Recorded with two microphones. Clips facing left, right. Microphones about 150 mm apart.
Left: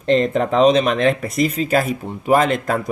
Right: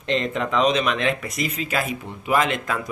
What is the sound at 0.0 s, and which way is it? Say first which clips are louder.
Speech: left 7 dB; 40° left (ahead or behind).